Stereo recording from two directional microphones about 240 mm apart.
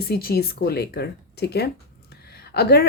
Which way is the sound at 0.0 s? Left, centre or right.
Left.